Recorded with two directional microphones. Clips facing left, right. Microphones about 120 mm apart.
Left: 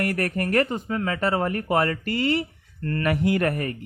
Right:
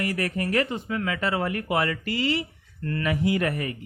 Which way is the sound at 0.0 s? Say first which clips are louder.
Left 2 dB; 55° left (ahead or behind).